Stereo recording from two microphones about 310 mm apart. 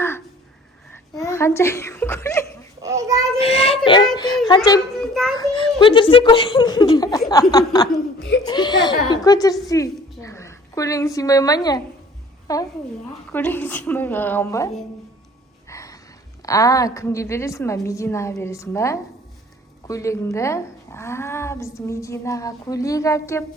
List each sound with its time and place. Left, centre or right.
1.1 s a child's voice: centre
2.8 s child singing: centre
3.4 s child singing: centre
4.4 s speech: centre
4.9 s a sound: centre
5.4 s a woman's voice: centre
15.7 s music: centre
16.4 s a woman's voice: centre